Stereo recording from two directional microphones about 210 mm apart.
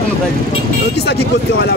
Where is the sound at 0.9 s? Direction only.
50° left (ahead or behind).